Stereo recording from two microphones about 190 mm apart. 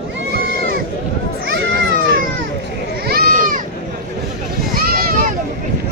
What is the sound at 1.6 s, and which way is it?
Children playing, 80° right.